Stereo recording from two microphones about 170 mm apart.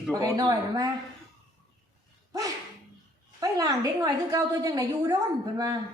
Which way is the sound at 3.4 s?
20° right (ahead or behind).